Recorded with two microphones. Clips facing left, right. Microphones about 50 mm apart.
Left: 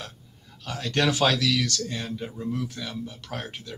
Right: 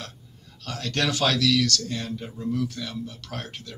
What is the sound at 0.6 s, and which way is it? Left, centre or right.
Speech, centre.